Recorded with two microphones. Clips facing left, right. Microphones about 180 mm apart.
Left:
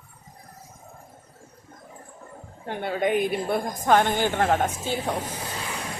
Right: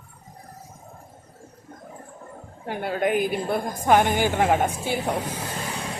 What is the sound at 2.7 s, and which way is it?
A woman's voice, 5° right (ahead or behind).